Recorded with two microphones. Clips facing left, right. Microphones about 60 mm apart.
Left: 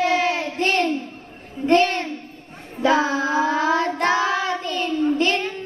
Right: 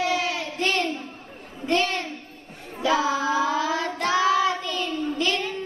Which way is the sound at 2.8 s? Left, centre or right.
Left.